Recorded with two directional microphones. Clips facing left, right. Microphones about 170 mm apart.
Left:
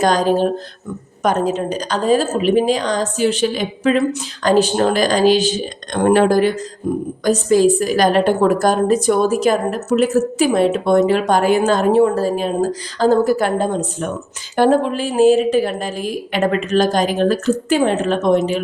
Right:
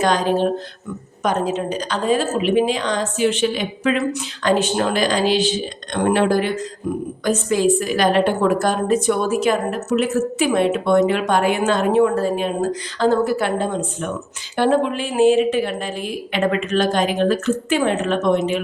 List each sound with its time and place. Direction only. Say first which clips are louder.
0.0 s a woman's voice: left 3 dB; 40° left (ahead or behind)
6.9 s a woman's voice: left 4 dB; 30° left (ahead or behind)